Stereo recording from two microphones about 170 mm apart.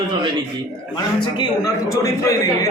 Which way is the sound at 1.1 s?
25° left (ahead or behind).